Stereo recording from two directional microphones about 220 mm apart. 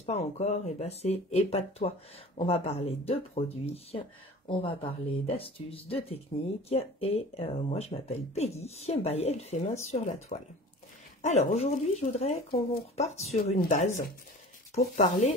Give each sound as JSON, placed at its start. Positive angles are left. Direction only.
{"t": 0.0, "sound": "speech", "side_deg": 30}